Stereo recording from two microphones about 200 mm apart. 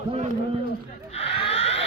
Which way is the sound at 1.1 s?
30° left (ahead or behind).